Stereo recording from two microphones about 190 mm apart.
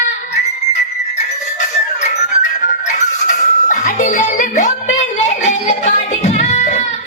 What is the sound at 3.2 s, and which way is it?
Music, 40° left (ahead or behind).